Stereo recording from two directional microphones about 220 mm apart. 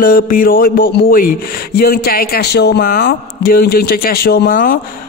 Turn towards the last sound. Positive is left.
turn(degrees=45)  # may be behind; listen again after turning